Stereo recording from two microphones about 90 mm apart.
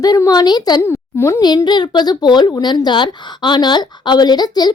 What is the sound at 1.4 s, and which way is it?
A woman's voice, 50° left (ahead or behind).